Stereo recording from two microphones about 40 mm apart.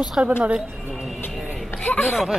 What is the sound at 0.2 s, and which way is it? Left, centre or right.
Speech, right.